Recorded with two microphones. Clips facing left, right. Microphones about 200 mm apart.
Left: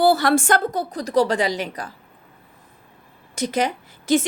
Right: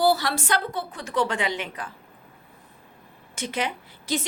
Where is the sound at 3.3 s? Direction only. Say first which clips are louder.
Left 7 dB; 40° left (ahead or behind).